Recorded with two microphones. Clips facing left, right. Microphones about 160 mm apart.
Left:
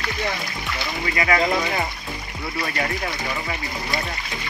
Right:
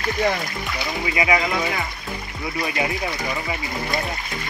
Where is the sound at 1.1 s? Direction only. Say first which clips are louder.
Right 1 dB; 15° right (ahead or behind).